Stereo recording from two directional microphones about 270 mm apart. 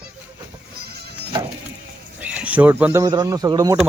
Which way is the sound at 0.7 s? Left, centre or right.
Right.